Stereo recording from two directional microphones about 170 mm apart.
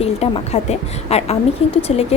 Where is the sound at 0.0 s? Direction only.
35° left (ahead or behind).